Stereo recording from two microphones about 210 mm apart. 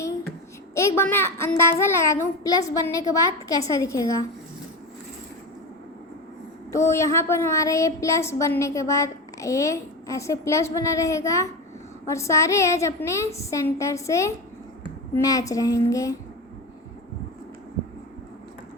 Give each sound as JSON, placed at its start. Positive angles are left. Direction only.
{"t": 0.0, "sound": "child singing", "side_deg": 15}
{"t": 3.7, "sound": "a woman's voice", "side_deg": 15}
{"t": 6.7, "sound": "a woman's voice", "side_deg": 15}